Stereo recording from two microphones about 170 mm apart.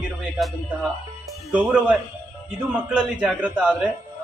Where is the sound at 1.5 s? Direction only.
5° right (ahead or behind).